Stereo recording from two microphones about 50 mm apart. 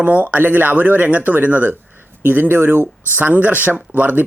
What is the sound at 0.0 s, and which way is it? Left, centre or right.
A man's voice, right.